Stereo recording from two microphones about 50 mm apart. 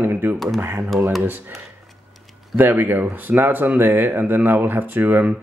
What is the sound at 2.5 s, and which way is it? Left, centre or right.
Speech, right.